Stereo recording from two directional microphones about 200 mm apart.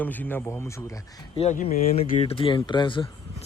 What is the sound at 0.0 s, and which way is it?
Speech, 10° left (ahead or behind).